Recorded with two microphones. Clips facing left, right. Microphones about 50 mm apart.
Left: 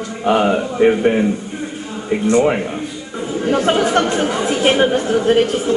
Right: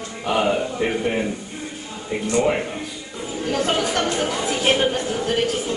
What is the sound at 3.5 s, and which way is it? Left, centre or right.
A woman's voice, left.